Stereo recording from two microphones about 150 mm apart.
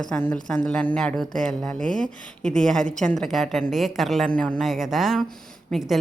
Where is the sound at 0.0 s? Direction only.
10° left (ahead or behind).